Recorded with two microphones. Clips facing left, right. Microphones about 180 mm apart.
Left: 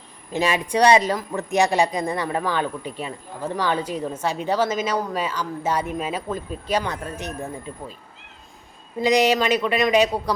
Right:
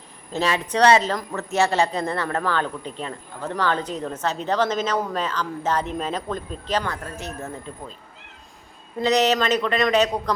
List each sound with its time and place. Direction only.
0.3 s speech: 15° left (ahead or behind)
9.0 s speech: 10° left (ahead or behind)